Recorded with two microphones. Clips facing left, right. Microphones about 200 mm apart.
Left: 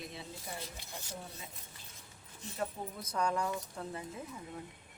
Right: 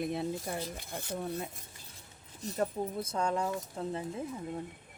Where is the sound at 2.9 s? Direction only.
25° right (ahead or behind).